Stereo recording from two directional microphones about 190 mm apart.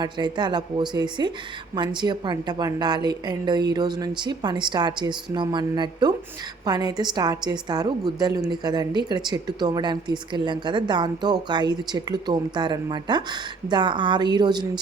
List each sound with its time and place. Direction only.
0.0 s a woman's voice: 25° right (ahead or behind)